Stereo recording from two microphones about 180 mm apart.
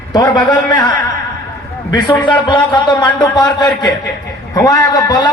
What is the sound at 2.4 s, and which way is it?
A man's voice, 25° left (ahead or behind).